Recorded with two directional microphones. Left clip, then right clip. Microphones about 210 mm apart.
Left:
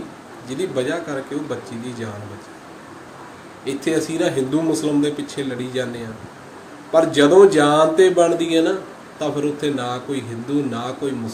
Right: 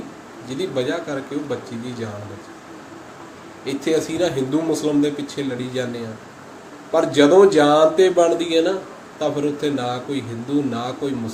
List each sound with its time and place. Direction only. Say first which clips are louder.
0.4 s speech: left 1 dB; 5° left (ahead or behind)
3.6 s speech: right 1 dB; 5° left (ahead or behind)